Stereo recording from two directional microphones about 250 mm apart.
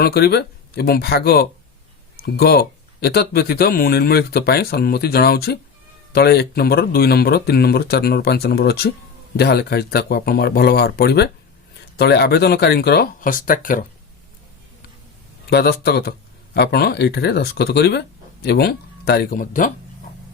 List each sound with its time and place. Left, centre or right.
0.0 s speech: left
15.4 s speech: left